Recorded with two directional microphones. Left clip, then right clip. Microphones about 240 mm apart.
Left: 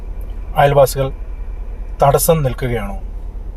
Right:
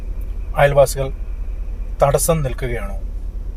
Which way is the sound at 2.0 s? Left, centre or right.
Centre.